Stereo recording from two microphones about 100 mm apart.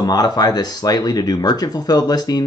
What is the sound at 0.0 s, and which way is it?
Speech, 40° left (ahead or behind).